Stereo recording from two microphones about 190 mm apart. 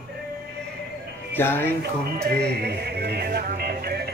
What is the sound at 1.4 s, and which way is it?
Speech, 10° left (ahead or behind).